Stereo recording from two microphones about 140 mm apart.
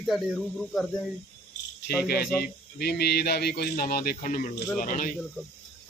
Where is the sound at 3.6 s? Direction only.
90° left; by 5.2 s 75° left (ahead or behind).